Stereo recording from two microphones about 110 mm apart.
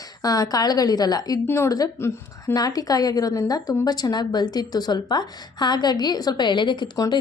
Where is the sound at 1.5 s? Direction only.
25° left (ahead or behind).